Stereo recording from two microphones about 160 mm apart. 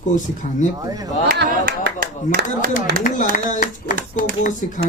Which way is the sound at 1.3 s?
65° right (ahead or behind).